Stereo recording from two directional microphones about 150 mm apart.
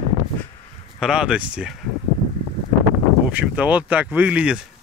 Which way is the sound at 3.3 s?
10° right (ahead or behind).